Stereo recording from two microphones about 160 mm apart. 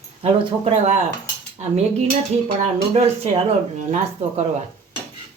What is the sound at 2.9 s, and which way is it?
Speech, 45° right (ahead or behind).